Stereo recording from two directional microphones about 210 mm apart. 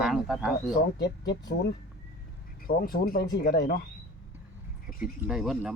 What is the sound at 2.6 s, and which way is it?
Speech, 45° left (ahead or behind).